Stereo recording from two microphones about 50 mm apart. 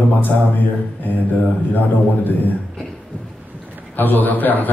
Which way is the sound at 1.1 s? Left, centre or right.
Left.